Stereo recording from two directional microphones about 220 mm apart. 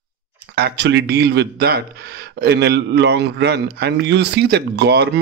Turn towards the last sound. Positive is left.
turn(degrees=-50)  # may be behind; listen again after turning